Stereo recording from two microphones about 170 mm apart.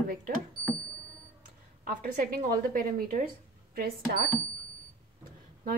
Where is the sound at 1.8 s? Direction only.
55° right (ahead or behind).